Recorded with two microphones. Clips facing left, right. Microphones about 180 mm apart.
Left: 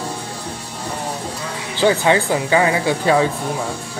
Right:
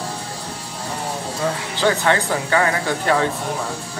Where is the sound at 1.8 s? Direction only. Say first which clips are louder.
Left 4 dB; 15° left (ahead or behind).